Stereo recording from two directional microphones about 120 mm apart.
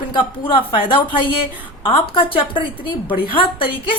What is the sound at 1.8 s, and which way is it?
Speech, 50° left (ahead or behind).